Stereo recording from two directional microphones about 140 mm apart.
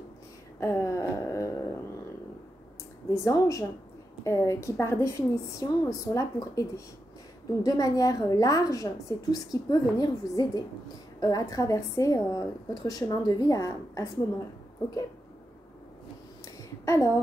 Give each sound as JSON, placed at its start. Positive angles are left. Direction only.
{"t": 0.6, "sound": "a sound", "side_deg": 20}
{"t": 3.3, "sound": "a woman's voice", "side_deg": 20}
{"t": 16.8, "sound": "a woman's voice", "side_deg": 20}